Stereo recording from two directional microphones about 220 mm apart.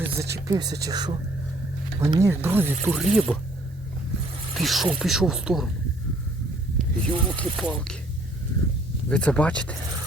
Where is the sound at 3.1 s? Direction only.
5° left (ahead or behind).